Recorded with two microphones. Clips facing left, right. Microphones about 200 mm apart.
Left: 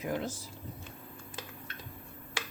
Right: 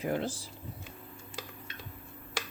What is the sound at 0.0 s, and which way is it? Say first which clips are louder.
Speech: right 2 dB; 30° right (ahead or behind).